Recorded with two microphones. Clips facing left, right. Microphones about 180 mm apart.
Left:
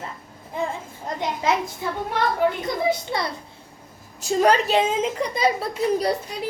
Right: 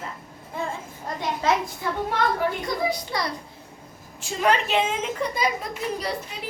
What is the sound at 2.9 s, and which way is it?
Speech, 25° left (ahead or behind).